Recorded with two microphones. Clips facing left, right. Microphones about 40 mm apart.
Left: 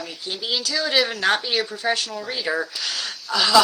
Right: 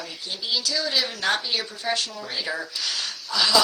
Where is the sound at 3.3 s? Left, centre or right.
Left.